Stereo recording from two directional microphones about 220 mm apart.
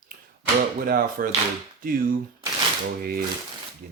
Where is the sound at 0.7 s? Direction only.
40° right (ahead or behind).